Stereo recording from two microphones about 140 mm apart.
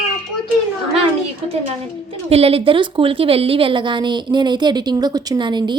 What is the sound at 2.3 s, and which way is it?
A woman's voice, 45° right (ahead or behind).